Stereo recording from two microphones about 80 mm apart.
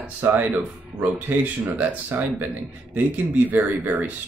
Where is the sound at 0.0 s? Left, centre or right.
Right.